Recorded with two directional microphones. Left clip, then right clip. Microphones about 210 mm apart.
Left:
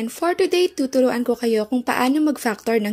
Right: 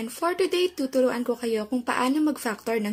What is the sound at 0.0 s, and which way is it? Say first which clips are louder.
Speech: left 5 dB; 30° left (ahead or behind).